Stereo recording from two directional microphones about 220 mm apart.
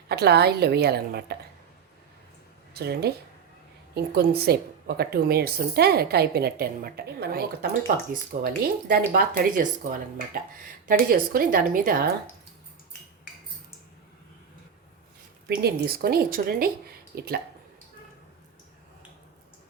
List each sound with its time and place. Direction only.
0.1 s a woman's voice: 45° right (ahead or behind)
2.7 s a woman's voice: 45° right (ahead or behind)
15.4 s a woman's voice: 45° right (ahead or behind)